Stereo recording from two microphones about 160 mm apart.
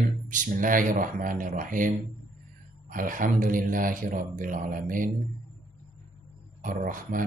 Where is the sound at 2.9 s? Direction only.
60° right (ahead or behind).